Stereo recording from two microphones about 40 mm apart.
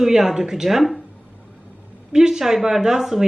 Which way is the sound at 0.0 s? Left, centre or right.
Centre.